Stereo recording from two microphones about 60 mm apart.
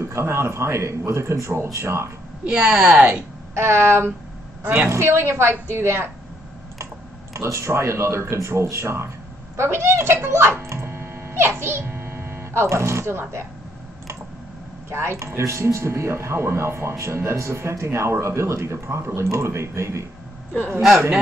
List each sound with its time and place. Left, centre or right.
0.0 s speech: right
2.4 s speech: centre
3.5 s speech: right
7.3 s a child's voice: right
14.9 s speech: right